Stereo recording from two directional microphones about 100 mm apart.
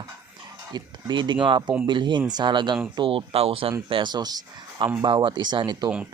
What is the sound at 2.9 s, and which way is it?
Speech, 60° right (ahead or behind).